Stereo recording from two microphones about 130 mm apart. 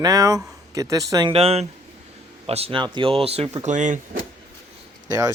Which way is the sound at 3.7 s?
75° right (ahead or behind).